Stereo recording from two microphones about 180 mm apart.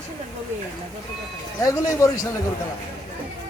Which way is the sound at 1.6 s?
20° left (ahead or behind).